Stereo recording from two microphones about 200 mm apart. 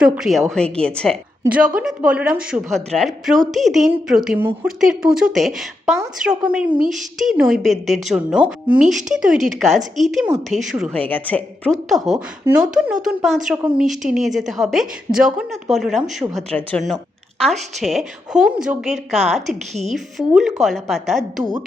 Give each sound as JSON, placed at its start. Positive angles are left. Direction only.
{"t": 0.0, "sound": "a woman's voice", "side_deg": 0}
{"t": 11.1, "sound": "a woman's voice", "side_deg": 5}
{"t": 18.9, "sound": "a woman's voice", "side_deg": -30}
{"t": 19.9, "sound": "a woman's voice", "side_deg": 0}